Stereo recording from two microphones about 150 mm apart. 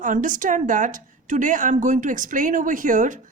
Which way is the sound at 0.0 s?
60° right (ahead or behind).